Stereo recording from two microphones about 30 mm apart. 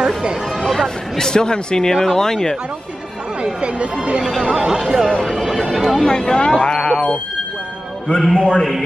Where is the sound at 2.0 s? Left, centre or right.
Centre.